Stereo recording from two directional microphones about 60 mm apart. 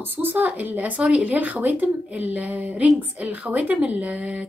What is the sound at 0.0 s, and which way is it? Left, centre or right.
Speech, right.